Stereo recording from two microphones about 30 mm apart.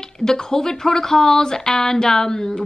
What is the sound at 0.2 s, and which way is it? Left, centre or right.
Speech, centre.